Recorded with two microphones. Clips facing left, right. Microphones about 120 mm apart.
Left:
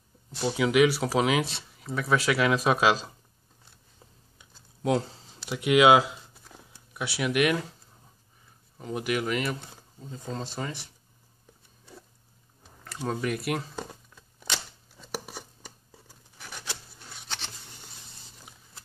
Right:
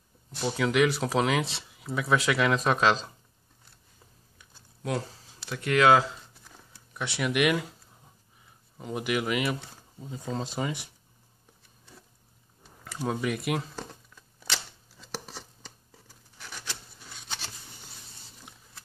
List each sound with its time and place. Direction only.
0.4 s speech: 5° left (ahead or behind)
4.4 s computer keyboard: 20° left (ahead or behind)
5.5 s speech: 15° left (ahead or behind)
8.7 s speech: 5° right (ahead or behind)
12.8 s speech: centre (ahead or behind)
15.0 s scissors: 10° left (ahead or behind)